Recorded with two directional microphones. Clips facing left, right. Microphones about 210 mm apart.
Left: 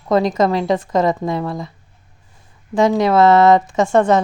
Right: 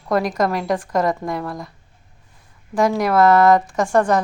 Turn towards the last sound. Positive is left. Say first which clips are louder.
# left 3 dB
turn(degrees=25)  # may be behind; listen again after turning